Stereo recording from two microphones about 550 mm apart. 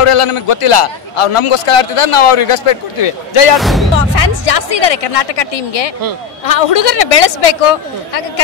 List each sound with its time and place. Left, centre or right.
0.0 s a man's voice: left
3.5 s speech: centre
3.9 s speech: left